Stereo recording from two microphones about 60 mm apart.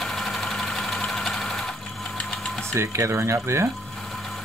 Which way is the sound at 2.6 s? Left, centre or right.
Right.